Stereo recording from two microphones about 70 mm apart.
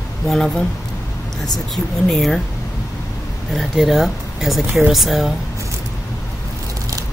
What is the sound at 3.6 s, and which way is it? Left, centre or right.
Speech, centre.